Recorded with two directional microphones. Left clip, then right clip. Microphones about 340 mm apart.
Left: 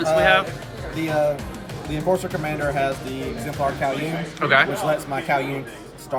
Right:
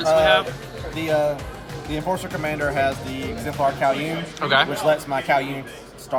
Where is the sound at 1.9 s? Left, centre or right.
Centre.